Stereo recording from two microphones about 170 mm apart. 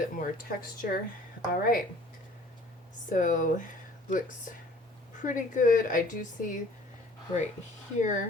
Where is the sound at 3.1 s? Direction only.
50° left (ahead or behind).